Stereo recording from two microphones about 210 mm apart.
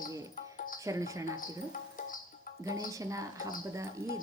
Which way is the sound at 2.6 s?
15° right (ahead or behind).